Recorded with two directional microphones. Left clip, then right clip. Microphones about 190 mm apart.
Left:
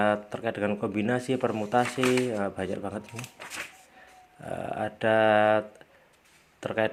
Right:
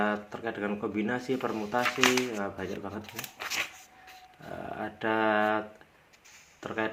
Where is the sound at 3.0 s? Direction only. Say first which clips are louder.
Left 1 dB; centre (ahead or behind).